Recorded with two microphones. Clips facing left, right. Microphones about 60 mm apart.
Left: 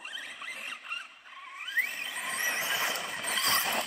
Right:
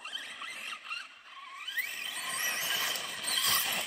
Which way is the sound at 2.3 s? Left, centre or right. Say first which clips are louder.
Left 3 dB; left.